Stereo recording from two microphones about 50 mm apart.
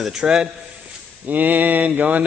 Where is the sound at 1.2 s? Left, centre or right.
Right.